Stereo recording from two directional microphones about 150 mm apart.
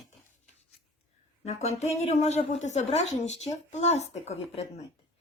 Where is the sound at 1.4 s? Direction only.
45° left (ahead or behind).